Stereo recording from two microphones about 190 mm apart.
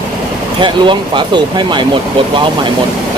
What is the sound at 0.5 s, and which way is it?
Speech, 25° right (ahead or behind).